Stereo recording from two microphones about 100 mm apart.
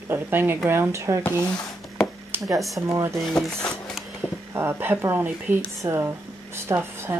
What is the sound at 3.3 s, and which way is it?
Speech, 5° left (ahead or behind).